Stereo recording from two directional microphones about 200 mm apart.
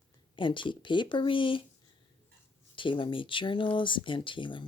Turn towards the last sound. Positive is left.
turn(degrees=25)  # may be behind; listen again after turning